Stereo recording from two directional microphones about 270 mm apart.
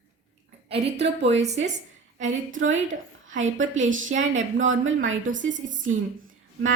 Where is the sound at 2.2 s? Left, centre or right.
Right.